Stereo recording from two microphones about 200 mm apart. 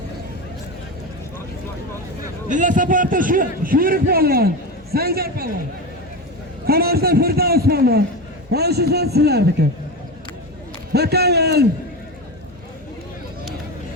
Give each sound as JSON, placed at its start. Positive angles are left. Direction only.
{"t": 2.5, "sound": "a man's voice", "side_deg": -40}
{"t": 6.7, "sound": "a man's voice", "side_deg": -50}
{"t": 10.9, "sound": "a man's voice", "side_deg": -55}